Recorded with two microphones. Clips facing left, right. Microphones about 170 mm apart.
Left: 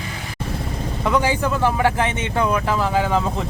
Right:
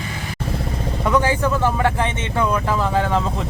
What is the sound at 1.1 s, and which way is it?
Speech, 10° left (ahead or behind).